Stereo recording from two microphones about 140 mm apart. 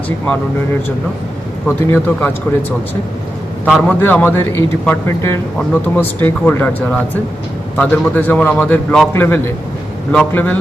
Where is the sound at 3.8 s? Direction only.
10° left (ahead or behind).